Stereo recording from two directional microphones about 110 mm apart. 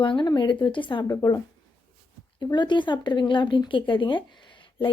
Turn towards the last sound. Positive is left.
turn(degrees=45)  # may be behind; listen again after turning